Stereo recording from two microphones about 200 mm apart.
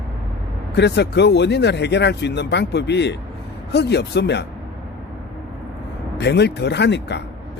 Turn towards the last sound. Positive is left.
turn(degrees=60)  # may be behind; listen again after turning